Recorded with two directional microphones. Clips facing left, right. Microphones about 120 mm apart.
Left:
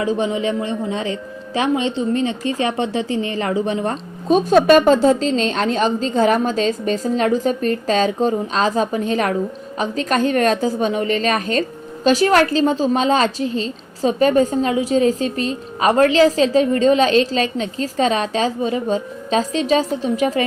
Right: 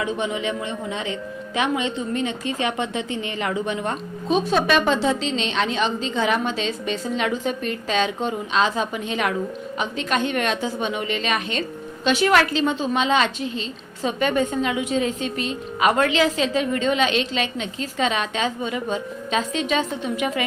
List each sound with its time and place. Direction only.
0.0 s a woman's voice: 35° left (ahead or behind)